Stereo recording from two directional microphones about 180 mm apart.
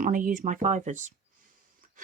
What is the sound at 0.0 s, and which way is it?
Speech, 50° right (ahead or behind).